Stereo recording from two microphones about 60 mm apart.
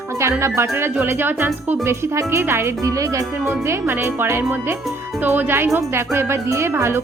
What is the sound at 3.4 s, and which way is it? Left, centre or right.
Speech, right.